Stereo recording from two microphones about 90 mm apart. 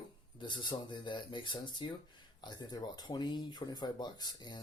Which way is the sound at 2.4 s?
50° left (ahead or behind).